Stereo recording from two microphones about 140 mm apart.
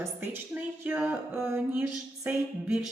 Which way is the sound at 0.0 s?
15° right (ahead or behind).